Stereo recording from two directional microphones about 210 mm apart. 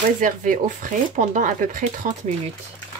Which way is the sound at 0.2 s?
40° right (ahead or behind).